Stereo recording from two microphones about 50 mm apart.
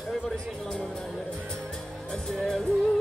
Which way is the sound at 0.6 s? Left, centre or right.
Centre.